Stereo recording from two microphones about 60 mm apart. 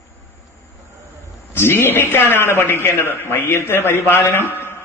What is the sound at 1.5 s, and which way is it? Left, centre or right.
A man's voice, left.